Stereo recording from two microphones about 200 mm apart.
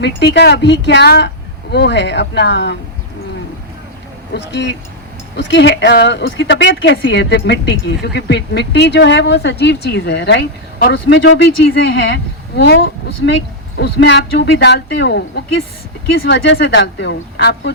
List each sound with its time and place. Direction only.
0.0 s speech: 60° left (ahead or behind)
4.4 s speech: 60° left (ahead or behind)
16.2 s speech: 60° left (ahead or behind)